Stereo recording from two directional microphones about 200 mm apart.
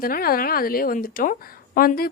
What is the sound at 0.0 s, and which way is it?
A woman's voice, 45° left (ahead or behind).